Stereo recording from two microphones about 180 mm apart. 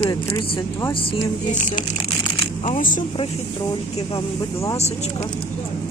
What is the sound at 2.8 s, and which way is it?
Speech, 50° left (ahead or behind).